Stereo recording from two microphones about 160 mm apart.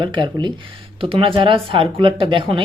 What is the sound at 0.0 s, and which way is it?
Speech, 30° right (ahead or behind).